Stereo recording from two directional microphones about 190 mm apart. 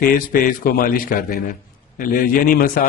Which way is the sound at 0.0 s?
50° left (ahead or behind).